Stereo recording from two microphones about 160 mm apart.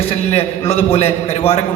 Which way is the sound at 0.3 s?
40° left (ahead or behind).